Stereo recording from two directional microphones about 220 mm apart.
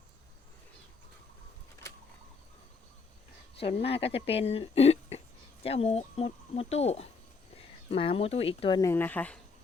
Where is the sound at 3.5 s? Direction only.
25° left (ahead or behind).